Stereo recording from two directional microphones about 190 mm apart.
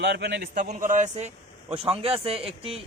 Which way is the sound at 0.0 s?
65° right (ahead or behind).